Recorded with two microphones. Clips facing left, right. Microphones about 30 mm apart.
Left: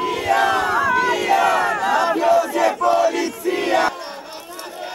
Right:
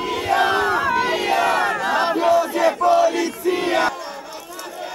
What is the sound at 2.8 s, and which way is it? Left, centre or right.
Battle cry, centre.